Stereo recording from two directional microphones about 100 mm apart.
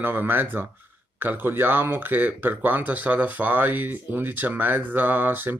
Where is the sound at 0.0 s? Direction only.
20° right (ahead or behind).